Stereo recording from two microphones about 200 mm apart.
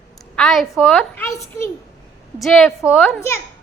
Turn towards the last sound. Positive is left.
turn(degrees=10)  # may be behind; listen again after turning